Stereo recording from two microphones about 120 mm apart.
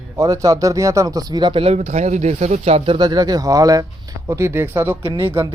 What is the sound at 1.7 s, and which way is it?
Speech, 70° right (ahead or behind).